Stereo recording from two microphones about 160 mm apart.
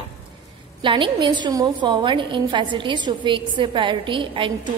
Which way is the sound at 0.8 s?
30° right (ahead or behind).